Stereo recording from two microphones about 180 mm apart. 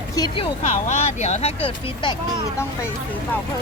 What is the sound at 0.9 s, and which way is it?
Speech, 40° left (ahead or behind).